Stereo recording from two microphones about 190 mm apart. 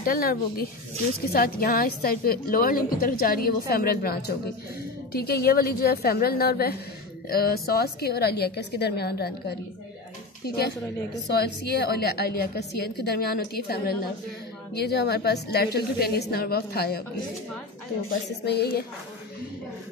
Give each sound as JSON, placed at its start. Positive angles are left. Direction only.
{"t": 0.0, "sound": "a woman's voice", "side_deg": 50}
{"t": 18.4, "sound": "a woman's voice", "side_deg": 60}